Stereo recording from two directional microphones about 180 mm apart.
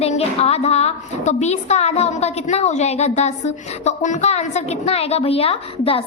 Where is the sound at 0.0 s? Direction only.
35° left (ahead or behind).